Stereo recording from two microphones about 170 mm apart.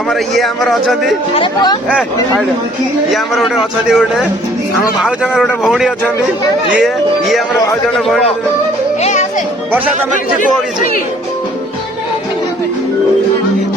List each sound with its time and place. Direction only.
0.1 s speech: centre (ahead or behind)
1.3 s speech: 30° left (ahead or behind)
3.1 s speech: centre (ahead or behind)
5.0 s speech: 5° right (ahead or behind)
9.0 s music: 40° left (ahead or behind)